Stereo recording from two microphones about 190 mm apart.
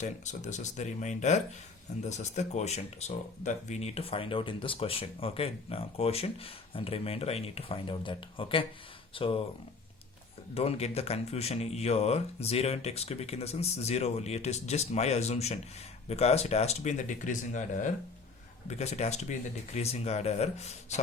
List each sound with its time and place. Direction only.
0.0 s speech: 40° left (ahead or behind)
10.5 s speech: 30° left (ahead or behind)